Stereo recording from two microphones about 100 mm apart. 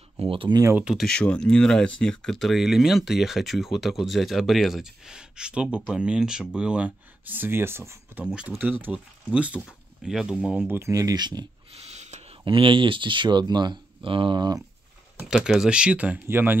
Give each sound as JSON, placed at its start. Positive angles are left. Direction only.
{"t": 0.2, "sound": "speech", "side_deg": -65}
{"t": 0.8, "sound": "speech", "side_deg": 0}
{"t": 8.2, "sound": "speech", "side_deg": -15}
{"t": 10.6, "sound": "speech", "side_deg": -20}
{"t": 10.9, "sound": "speech", "side_deg": -35}
{"t": 11.7, "sound": "speech", "side_deg": -90}
{"t": 15.2, "sound": "speech", "side_deg": -5}